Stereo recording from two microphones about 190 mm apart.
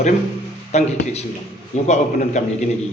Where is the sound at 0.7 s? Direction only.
35° left (ahead or behind).